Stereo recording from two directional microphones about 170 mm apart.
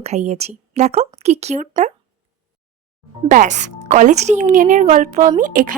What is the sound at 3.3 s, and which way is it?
Speech, 45° right (ahead or behind).